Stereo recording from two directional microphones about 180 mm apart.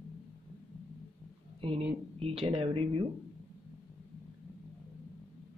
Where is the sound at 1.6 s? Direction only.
35° right (ahead or behind).